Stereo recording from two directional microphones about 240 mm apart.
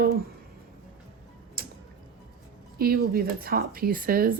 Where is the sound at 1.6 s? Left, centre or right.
Right.